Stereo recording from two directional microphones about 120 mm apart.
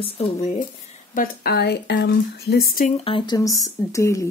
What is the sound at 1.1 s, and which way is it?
Speech, 90° left.